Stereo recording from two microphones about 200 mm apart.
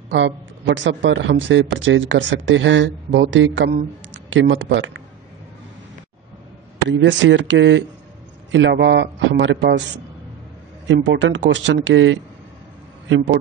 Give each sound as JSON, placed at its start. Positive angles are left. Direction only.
{"t": 0.1, "sound": "a man's voice", "side_deg": -65}
{"t": 6.9, "sound": "speech", "side_deg": -70}
{"t": 11.1, "sound": "a man's voice", "side_deg": -65}